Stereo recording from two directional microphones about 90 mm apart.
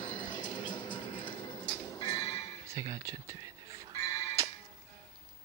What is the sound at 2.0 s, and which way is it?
Music, 50° left (ahead or behind).